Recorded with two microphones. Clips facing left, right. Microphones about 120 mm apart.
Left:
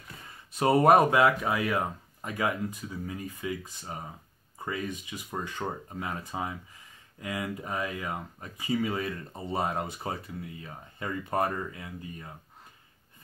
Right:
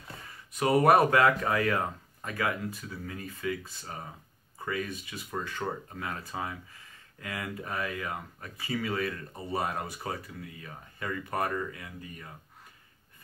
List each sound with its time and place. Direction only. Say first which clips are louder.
0.5 s speech: left 2 dB; 30° left (ahead or behind)